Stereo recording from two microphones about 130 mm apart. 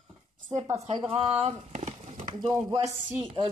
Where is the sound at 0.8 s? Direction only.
55° right (ahead or behind).